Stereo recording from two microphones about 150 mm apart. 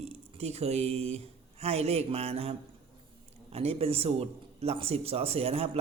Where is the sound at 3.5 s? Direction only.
40° right (ahead or behind).